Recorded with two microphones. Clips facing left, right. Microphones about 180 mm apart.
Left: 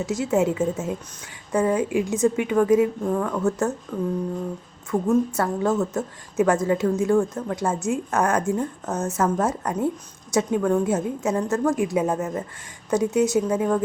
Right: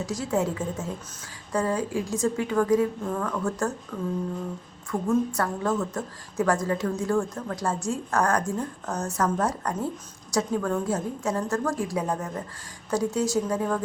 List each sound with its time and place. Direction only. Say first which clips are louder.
0.0 s a woman's voice: left 5 dB; 25° left (ahead or behind)
4.9 s a woman's voice: left 4 dB; 25° left (ahead or behind)